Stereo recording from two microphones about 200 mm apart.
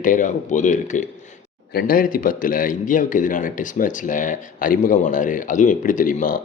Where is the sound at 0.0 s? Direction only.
40° left (ahead or behind).